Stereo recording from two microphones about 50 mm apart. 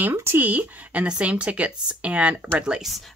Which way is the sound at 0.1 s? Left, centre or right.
Right.